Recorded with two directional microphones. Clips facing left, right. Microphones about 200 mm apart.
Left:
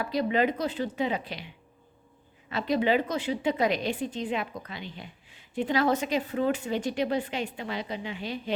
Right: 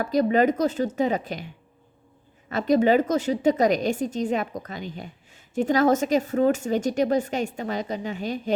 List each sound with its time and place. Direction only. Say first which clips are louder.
0.0 s a woman's voice: right 6 dB; 45° right (ahead or behind)
2.5 s a woman's voice: right 6 dB; 45° right (ahead or behind)